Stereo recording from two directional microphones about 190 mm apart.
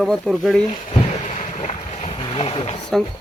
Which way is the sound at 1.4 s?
45° left (ahead or behind).